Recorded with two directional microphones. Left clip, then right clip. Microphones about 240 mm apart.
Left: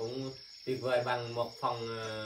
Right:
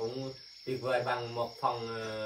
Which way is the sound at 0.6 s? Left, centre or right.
Centre.